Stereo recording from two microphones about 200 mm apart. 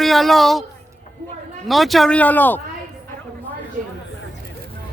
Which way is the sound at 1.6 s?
Centre (ahead or behind).